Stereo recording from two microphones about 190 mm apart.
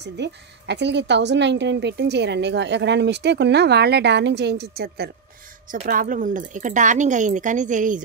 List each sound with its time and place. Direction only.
0.0 s a woman's voice: 65° right (ahead or behind); by 8.0 s 40° right (ahead or behind)